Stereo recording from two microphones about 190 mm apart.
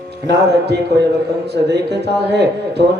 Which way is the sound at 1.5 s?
60° right (ahead or behind).